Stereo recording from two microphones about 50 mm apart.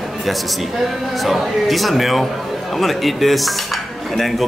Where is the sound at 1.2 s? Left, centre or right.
Centre.